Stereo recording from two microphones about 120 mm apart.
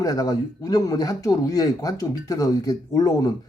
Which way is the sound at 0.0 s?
30° left (ahead or behind).